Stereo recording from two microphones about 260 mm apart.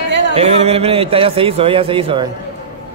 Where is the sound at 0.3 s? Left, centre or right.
Right.